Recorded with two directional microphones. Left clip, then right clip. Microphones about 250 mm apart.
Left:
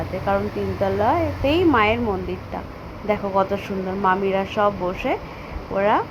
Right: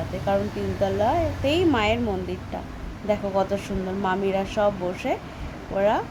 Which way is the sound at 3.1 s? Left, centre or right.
Centre.